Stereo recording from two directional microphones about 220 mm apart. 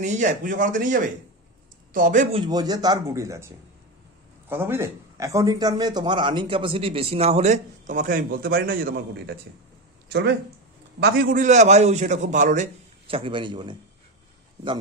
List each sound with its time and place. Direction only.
0.0 s a man's voice: 35° right (ahead or behind)
2.3 s a man's voice: 20° right (ahead or behind)